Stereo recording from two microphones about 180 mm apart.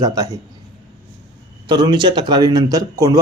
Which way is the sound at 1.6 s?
25° right (ahead or behind).